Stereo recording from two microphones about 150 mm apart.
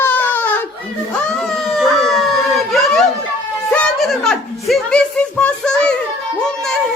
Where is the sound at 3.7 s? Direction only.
5° left (ahead or behind).